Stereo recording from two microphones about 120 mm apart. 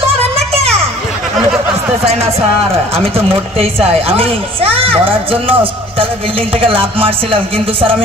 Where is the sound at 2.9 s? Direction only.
55° right (ahead or behind).